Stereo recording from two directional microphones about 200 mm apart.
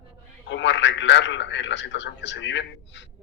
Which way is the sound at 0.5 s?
60° left (ahead or behind).